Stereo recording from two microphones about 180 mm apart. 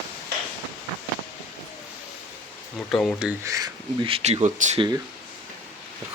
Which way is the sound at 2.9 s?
5° left (ahead or behind).